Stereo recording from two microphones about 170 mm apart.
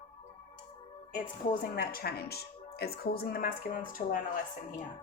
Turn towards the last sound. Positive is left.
turn(degrees=55)  # may be behind; listen again after turning